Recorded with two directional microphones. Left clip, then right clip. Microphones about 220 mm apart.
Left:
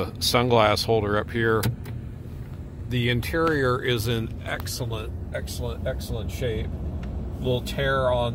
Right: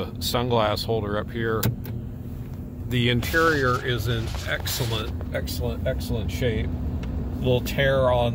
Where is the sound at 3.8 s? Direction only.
50° left (ahead or behind).